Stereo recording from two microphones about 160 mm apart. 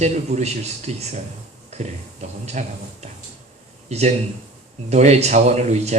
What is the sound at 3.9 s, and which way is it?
A man's voice, 45° right (ahead or behind).